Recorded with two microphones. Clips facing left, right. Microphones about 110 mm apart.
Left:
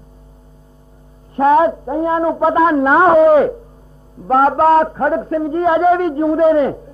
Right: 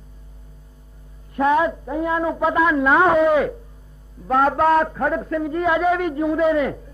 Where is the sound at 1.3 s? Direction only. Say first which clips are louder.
Left 6 dB; 40° left (ahead or behind).